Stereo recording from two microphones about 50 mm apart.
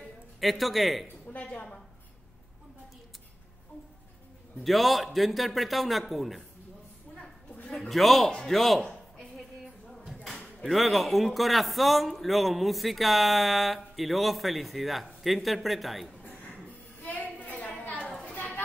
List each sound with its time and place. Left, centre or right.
0.4 s a man's voice: centre
1.2 s a woman's voice: left
4.6 s a man's voice: centre
7.9 s a man's voice: centre
9.4 s a sound: centre
10.6 s a man's voice: centre
17.1 s a sound: left